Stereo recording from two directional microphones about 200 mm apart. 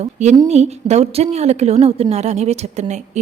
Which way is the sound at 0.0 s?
35° right (ahead or behind).